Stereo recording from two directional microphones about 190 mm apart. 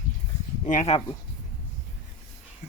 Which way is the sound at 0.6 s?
40° left (ahead or behind).